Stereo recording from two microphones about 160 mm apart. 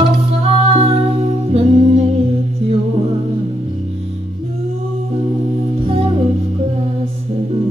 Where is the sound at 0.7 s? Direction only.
40° right (ahead or behind).